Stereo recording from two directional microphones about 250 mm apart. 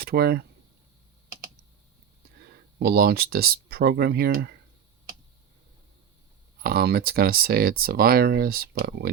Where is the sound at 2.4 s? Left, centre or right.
Right.